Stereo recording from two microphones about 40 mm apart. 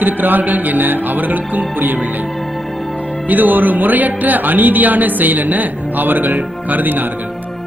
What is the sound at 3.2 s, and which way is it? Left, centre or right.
Speech, right.